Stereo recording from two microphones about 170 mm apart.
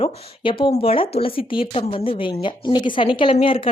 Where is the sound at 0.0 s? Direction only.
30° left (ahead or behind).